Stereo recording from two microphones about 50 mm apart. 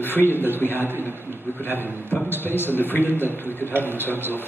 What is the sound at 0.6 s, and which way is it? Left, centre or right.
A man's voice, right.